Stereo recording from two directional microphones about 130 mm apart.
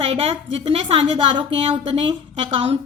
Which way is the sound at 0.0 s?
45° right (ahead or behind).